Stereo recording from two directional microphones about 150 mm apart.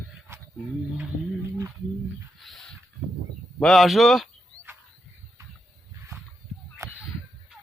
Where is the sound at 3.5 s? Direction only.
Centre (ahead or behind).